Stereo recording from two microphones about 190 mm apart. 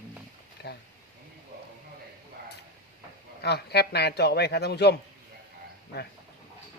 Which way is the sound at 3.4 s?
60° left (ahead or behind).